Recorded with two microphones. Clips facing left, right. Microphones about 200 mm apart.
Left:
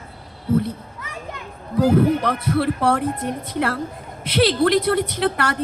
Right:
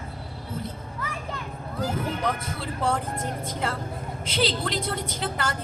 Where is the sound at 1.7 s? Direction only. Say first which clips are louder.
Left 13 dB; 65° left (ahead or behind).